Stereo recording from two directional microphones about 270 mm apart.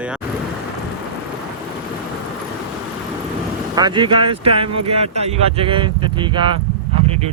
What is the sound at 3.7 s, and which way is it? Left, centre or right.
Speech, centre.